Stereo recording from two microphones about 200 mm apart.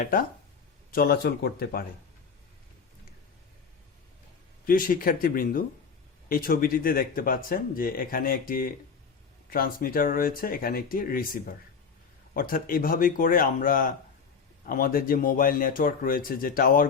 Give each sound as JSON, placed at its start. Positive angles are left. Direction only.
{"t": 0.0, "sound": "speech", "side_deg": 45}
{"t": 4.6, "sound": "speech", "side_deg": 45}